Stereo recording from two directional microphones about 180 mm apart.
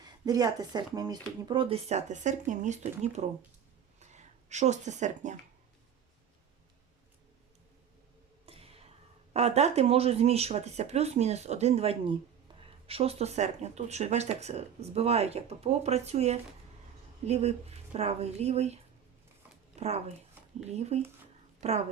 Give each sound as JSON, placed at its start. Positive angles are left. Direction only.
{"t": 0.0, "sound": "speech", "side_deg": -20}
{"t": 8.4, "sound": "a sound", "side_deg": -35}
{"t": 9.3, "sound": "speech", "side_deg": -35}